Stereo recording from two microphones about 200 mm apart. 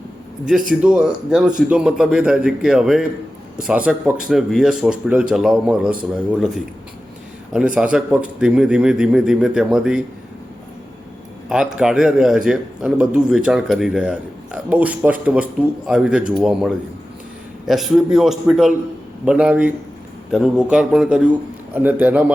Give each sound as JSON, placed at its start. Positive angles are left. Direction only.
{"t": 0.8, "sound": "a man's voice", "side_deg": -5}
{"t": 11.4, "sound": "a man's voice", "side_deg": -5}